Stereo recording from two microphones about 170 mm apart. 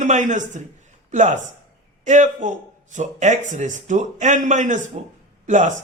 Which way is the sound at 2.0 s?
45° right (ahead or behind).